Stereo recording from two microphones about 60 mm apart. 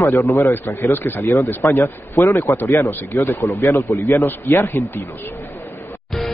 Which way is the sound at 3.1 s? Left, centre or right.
Left.